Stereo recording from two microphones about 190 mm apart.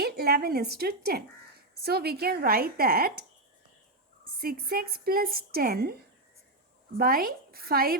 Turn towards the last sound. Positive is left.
turn(degrees=-50)  # may be behind; listen again after turning